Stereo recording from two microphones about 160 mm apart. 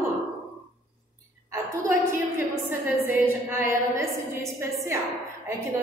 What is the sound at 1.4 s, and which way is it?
A woman's voice, 15° right (ahead or behind).